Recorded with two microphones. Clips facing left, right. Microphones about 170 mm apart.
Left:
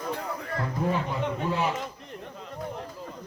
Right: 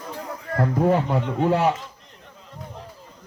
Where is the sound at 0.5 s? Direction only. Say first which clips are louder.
Right 9 dB; 60° right (ahead or behind).